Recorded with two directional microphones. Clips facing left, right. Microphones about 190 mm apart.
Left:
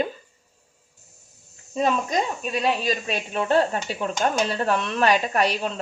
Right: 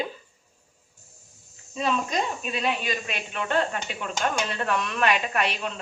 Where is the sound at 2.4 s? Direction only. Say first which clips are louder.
Left 4 dB; 35° left (ahead or behind).